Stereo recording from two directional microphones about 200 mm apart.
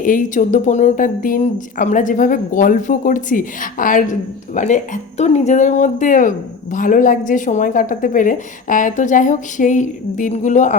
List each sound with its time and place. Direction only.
0.0 s speech: 40° left (ahead or behind)